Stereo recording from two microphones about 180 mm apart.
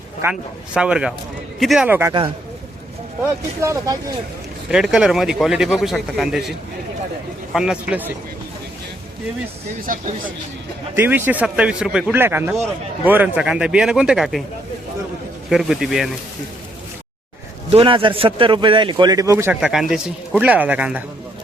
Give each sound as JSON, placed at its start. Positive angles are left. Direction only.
{"t": 0.2, "sound": "a man's voice", "side_deg": -10}
{"t": 3.6, "sound": "a man's voice", "side_deg": -15}
{"t": 4.7, "sound": "a man's voice", "side_deg": -5}
{"t": 7.5, "sound": "a man's voice", "side_deg": -5}
{"t": 9.8, "sound": "speech", "side_deg": -50}
{"t": 10.9, "sound": "a man's voice", "side_deg": -10}
{"t": 15.4, "sound": "a man's voice", "side_deg": 0}
{"t": 17.7, "sound": "a man's voice", "side_deg": -30}
{"t": 19.5, "sound": "a man's voice", "side_deg": -5}